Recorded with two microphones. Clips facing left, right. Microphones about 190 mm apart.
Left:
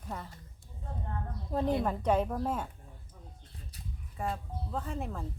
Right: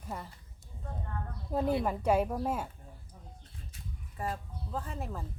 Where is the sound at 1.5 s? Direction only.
5° right (ahead or behind).